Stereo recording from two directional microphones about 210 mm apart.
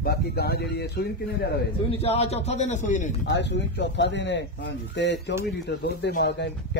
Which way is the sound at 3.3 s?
55° left (ahead or behind).